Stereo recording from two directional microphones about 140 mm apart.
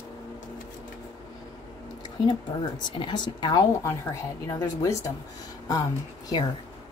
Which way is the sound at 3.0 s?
35° left (ahead or behind).